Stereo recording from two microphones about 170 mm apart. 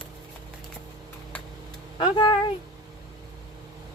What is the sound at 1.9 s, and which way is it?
Speech, 30° left (ahead or behind).